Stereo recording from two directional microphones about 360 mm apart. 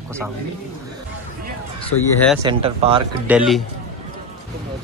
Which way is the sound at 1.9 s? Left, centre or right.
Left.